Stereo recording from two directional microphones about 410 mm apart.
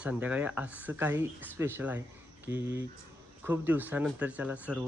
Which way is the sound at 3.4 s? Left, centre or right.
Centre.